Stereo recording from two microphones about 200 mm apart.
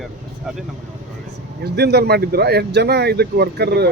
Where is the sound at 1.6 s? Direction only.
55° right (ahead or behind).